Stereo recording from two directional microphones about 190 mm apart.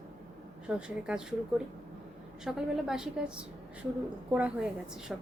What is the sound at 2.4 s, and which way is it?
A woman's voice, 5° right (ahead or behind).